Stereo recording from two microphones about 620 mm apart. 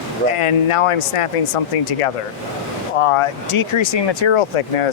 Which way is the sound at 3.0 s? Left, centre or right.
Left.